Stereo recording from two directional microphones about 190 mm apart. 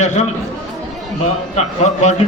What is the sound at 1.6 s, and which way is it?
Speech, 40° left (ahead or behind).